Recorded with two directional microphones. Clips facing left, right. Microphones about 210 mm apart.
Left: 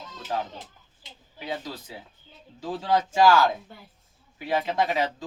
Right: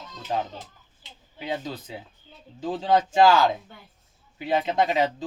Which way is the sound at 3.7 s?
Centre (ahead or behind).